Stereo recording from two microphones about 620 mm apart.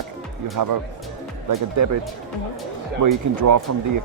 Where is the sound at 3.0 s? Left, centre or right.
Right.